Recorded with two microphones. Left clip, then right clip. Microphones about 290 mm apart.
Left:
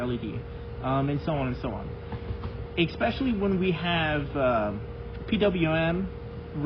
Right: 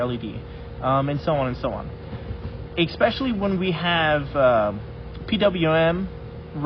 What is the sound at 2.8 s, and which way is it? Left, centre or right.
Speech, right.